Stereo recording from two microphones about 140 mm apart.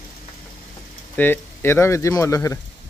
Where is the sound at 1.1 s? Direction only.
15° left (ahead or behind).